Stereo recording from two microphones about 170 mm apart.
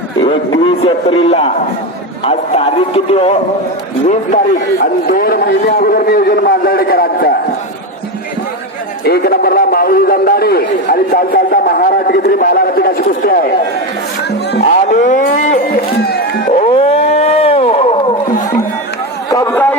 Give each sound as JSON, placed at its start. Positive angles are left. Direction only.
{"t": 0.2, "sound": "a man's voice", "side_deg": 30}
{"t": 4.8, "sound": "a man's voice", "side_deg": 60}
{"t": 9.0, "sound": "a man's voice", "side_deg": 65}
{"t": 14.3, "sound": "music", "side_deg": 75}
{"t": 14.8, "sound": "cattle", "side_deg": 45}
{"t": 15.7, "sound": "a sound", "side_deg": 65}
{"t": 16.5, "sound": "music", "side_deg": 40}
{"t": 19.5, "sound": "a sound", "side_deg": 10}